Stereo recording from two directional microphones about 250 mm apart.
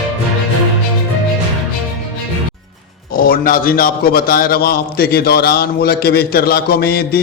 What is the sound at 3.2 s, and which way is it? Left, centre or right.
A man's voice, left.